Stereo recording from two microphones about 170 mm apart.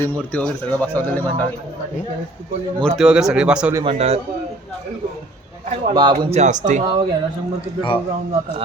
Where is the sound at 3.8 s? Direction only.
35° right (ahead or behind).